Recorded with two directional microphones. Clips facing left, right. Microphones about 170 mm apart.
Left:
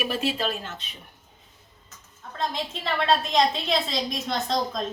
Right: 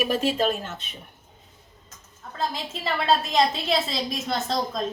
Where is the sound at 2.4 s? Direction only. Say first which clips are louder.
Even; centre (ahead or behind).